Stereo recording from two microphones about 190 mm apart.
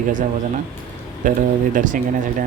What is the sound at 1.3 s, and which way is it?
Speech, 45° right (ahead or behind).